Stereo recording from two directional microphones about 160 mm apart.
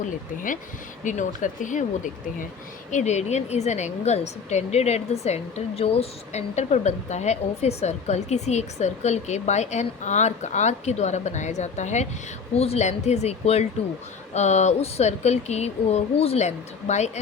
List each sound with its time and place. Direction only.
0.0 s a woman's voice: 55° left (ahead or behind)
2.9 s a woman's voice: 45° left (ahead or behind)